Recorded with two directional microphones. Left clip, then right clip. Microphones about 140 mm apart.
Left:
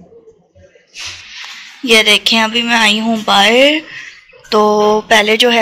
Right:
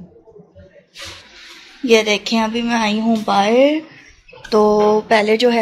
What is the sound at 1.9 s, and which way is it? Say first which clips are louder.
A woman's voice: left 5 dB; centre (ahead or behind).